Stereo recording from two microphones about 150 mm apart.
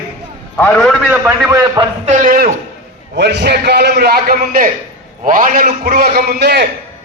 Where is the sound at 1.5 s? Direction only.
25° right (ahead or behind).